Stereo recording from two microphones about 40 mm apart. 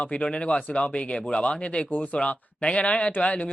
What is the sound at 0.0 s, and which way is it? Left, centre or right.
Speech, left.